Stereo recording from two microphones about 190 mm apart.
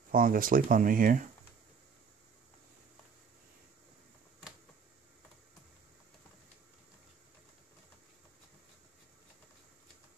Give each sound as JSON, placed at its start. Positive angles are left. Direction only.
{"t": 0.1, "sound": "speech", "side_deg": -50}